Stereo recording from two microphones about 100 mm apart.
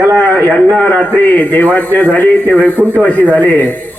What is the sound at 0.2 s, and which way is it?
A man's voice, 15° left (ahead or behind).